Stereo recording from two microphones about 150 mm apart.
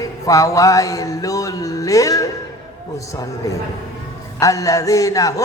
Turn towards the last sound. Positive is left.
turn(degrees=20)  # may be behind; listen again after turning